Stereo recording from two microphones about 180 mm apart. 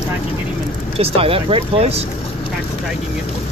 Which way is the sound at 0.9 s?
30° right (ahead or behind).